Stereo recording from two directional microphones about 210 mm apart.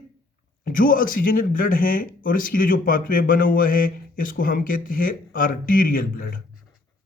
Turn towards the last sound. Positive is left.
turn(degrees=40)  # may be behind; listen again after turning